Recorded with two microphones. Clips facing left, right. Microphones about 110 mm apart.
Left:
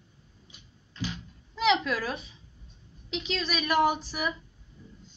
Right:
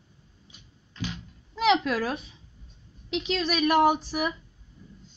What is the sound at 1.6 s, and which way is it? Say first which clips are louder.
A woman's voice: right 3 dB; 55° right (ahead or behind).